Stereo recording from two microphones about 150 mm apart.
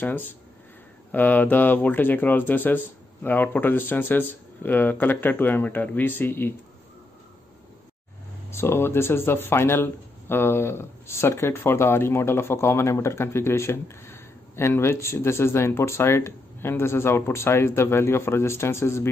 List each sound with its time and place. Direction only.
1.1 s speech: 10° left (ahead or behind)
8.5 s speech: 15° left (ahead or behind)